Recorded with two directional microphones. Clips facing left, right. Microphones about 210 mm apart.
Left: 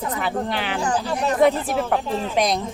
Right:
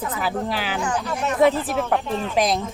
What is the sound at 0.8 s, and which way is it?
Speech, 35° left (ahead or behind).